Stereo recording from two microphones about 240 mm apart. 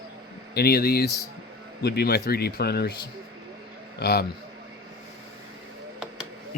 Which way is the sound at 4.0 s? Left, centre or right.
Left.